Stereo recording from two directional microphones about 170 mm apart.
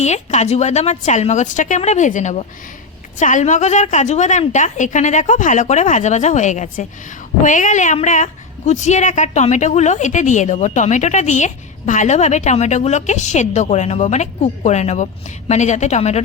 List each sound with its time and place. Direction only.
0.0 s a woman's voice: 40° left (ahead or behind)